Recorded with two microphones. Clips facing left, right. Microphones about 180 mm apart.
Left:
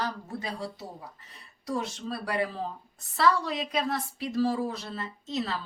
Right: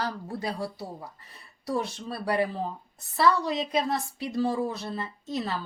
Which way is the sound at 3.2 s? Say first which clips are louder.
Right 2 dB; 25° right (ahead or behind).